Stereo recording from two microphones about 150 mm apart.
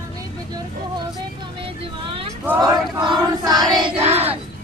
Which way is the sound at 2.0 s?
35° right (ahead or behind).